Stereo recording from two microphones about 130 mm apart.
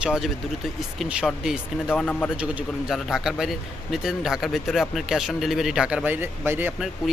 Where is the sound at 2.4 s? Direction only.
10° right (ahead or behind).